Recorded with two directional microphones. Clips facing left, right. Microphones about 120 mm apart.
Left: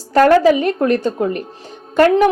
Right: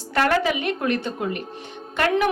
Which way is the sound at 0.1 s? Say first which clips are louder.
Left 10 dB; 40° left (ahead or behind).